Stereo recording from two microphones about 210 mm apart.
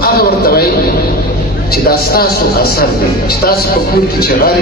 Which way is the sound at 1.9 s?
45° left (ahead or behind).